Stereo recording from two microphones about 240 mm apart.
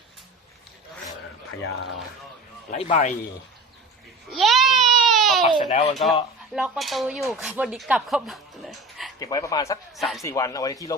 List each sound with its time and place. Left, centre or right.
2.6 s a man's voice: left
4.3 s baby cry: centre
5.5 s a man's voice: left
6.5 s speech: centre
9.1 s speech: centre
9.9 s a man's voice: centre
10.2 s speech: centre